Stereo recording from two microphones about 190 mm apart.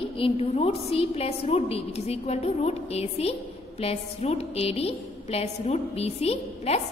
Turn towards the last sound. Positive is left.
turn(degrees=35)  # may be behind; listen again after turning